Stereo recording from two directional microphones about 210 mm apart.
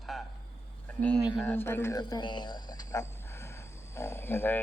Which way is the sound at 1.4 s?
10° left (ahead or behind).